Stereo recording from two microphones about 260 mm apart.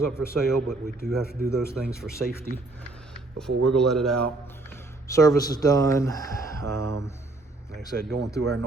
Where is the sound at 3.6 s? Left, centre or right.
Centre.